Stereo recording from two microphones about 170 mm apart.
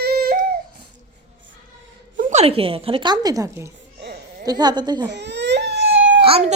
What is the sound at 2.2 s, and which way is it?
A woman's voice, 45° right (ahead or behind).